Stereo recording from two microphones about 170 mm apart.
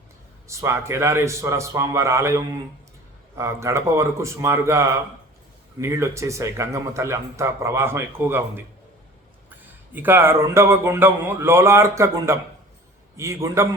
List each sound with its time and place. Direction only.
0.4 s speech: 15° right (ahead or behind)
9.9 s speech: 10° right (ahead or behind)